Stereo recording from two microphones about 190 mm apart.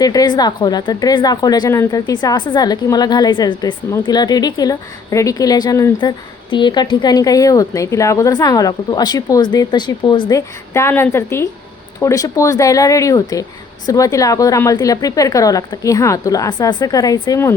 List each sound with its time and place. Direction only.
0.0 s a woman's voice: 20° left (ahead or behind)